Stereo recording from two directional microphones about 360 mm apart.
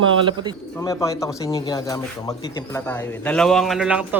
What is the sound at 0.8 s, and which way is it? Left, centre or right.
Speech, centre.